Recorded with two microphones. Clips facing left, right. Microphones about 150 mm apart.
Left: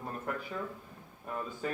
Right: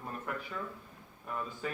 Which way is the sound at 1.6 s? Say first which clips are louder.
Left 3 dB; 40° left (ahead or behind).